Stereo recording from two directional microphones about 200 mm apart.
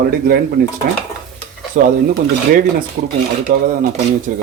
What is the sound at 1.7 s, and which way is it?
Speech, 35° right (ahead or behind).